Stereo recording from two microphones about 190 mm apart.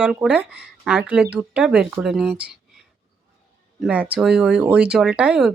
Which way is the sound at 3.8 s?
5° right (ahead or behind).